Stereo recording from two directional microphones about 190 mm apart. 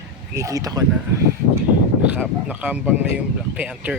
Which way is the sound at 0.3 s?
15° right (ahead or behind).